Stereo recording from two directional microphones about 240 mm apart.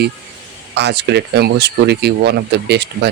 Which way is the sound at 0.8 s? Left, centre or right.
Right.